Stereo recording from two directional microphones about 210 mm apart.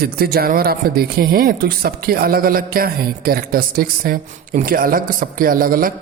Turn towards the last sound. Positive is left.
turn(degrees=-45)  # may be behind; listen again after turning